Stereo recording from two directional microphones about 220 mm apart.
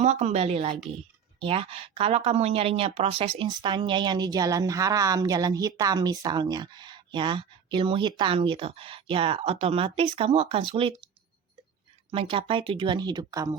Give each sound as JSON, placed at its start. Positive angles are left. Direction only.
{"t": 0.0, "sound": "a woman's voice", "side_deg": -30}
{"t": 12.1, "sound": "speech", "side_deg": -25}